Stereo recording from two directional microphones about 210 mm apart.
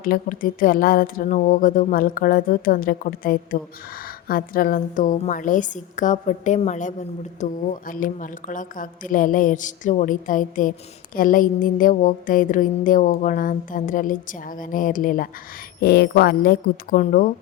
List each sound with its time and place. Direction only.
0.0 s a woman's voice: 40° left (ahead or behind)